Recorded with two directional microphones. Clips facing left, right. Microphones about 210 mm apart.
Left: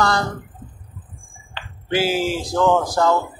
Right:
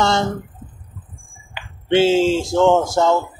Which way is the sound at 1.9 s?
25° right (ahead or behind).